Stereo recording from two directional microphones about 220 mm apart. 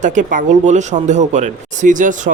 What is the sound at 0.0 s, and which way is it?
Speech, 35° right (ahead or behind).